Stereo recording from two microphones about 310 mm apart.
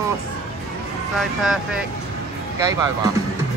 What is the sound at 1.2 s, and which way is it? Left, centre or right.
Speech, centre.